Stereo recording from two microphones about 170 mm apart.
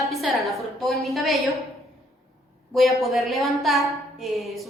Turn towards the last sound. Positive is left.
turn(degrees=0)  # may be behind; listen again after turning